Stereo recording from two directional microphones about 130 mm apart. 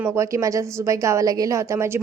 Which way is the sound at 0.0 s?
20° right (ahead or behind).